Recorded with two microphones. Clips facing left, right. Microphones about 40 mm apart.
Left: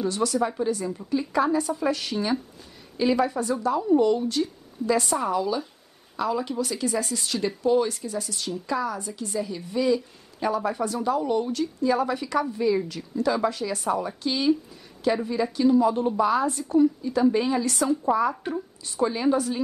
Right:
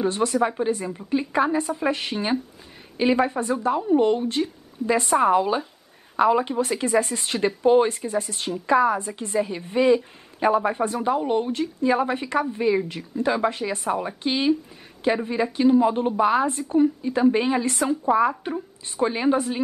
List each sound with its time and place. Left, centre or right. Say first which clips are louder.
0.0 s speech: right 3 dB; right